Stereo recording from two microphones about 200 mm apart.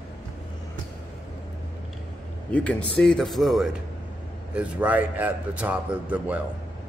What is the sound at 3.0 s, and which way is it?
Speech, centre (ahead or behind).